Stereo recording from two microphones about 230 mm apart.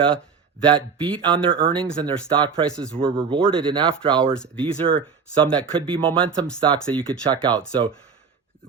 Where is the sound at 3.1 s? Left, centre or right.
Right.